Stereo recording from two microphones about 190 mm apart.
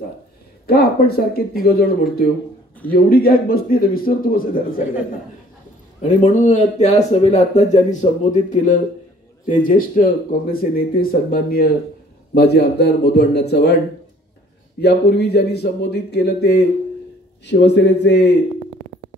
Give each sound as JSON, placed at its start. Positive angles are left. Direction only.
{"t": 0.7, "sound": "speech", "side_deg": 55}
{"t": 6.0, "sound": "speech", "side_deg": 40}
{"t": 14.8, "sound": "a man's voice", "side_deg": 60}